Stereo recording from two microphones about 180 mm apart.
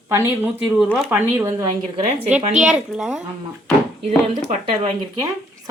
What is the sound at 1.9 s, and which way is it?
Speech, 35° right (ahead or behind).